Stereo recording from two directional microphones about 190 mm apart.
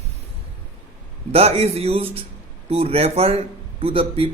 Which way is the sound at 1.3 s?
30° right (ahead or behind).